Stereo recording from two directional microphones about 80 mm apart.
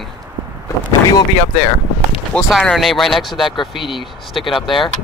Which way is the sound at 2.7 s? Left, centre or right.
Centre.